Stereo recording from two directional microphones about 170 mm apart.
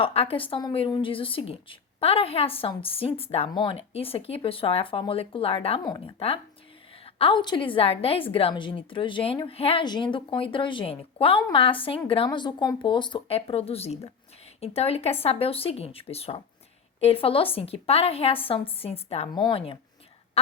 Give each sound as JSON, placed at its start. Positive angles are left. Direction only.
{"t": 0.0, "sound": "a woman's voice", "side_deg": 35}
{"t": 19.3, "sound": "speech", "side_deg": 25}